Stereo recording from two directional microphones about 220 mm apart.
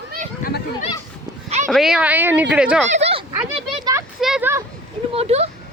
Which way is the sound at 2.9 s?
30° right (ahead or behind).